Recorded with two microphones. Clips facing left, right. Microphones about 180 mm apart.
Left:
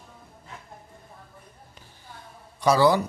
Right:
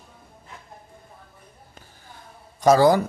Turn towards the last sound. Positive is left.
turn(degrees=-45)  # may be behind; listen again after turning